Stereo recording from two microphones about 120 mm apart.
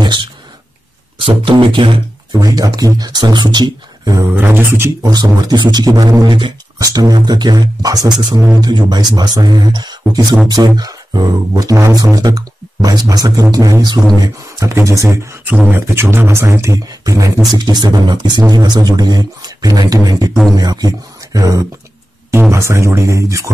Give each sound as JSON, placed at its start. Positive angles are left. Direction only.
{"t": 0.0, "sound": "a sound", "side_deg": -40}
{"t": 1.1, "sound": "speech", "side_deg": -50}
{"t": 2.4, "sound": "speech", "side_deg": -30}
{"t": 4.3, "sound": "speech", "side_deg": -15}
{"t": 5.0, "sound": "speech", "side_deg": -35}